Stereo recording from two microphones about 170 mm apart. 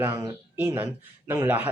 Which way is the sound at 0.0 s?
15° right (ahead or behind).